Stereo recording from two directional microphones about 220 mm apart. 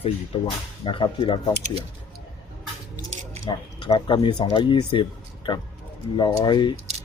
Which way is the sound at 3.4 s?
25° left (ahead or behind).